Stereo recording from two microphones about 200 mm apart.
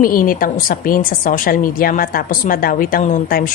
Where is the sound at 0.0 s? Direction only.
45° left (ahead or behind).